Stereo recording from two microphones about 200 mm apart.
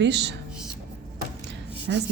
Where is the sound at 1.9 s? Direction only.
55° right (ahead or behind).